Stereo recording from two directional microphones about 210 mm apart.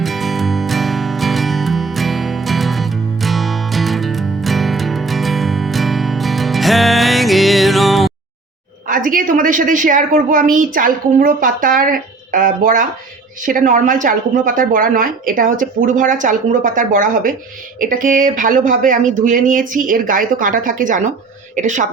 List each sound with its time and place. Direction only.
0.0 s music: centre (ahead or behind)
8.9 s a woman's voice: 40° right (ahead or behind)